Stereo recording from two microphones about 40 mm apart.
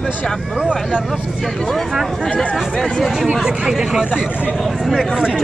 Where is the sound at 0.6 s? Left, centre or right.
Centre.